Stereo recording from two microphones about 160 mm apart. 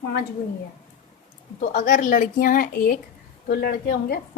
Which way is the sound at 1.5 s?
60° left (ahead or behind).